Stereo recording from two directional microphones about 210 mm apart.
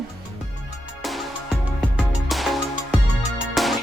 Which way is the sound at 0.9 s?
Centre (ahead or behind).